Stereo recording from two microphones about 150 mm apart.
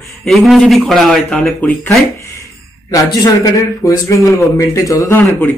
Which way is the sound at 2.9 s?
25° left (ahead or behind).